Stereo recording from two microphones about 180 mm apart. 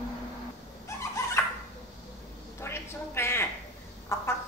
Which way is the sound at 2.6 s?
15° left (ahead or behind).